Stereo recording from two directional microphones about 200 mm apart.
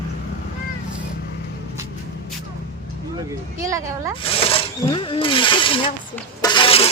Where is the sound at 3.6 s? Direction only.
15° right (ahead or behind).